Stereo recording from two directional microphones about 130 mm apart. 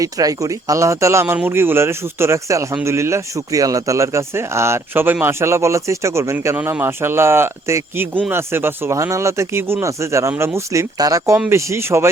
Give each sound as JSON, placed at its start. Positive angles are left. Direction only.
{"t": 0.0, "sound": "speech", "side_deg": -25}